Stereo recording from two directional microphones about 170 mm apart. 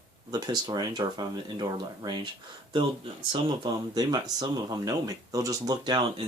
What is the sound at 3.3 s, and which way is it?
Speech, 25° right (ahead or behind).